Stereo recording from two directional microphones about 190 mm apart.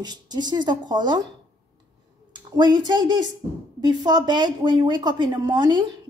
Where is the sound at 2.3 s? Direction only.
20° right (ahead or behind).